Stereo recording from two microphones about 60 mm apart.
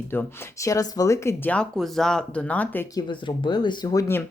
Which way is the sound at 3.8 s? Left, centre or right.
Left.